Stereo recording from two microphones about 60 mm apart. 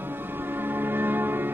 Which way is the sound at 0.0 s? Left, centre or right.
Right.